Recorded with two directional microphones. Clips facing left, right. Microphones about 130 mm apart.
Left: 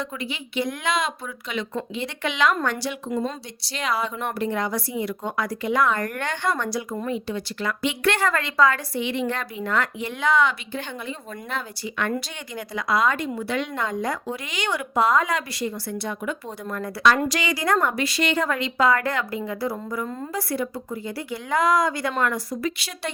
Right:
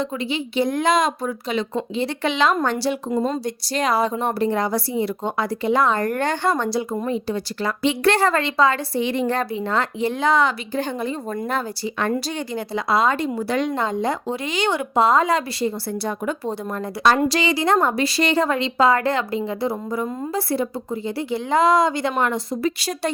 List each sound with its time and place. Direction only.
0.0 s a woman's voice: 30° right (ahead or behind)
9.0 s a woman's voice: 35° right (ahead or behind)
22.8 s a woman's voice: 40° right (ahead or behind)